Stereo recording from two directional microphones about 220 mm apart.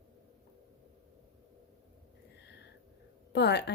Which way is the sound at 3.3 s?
50° left (ahead or behind).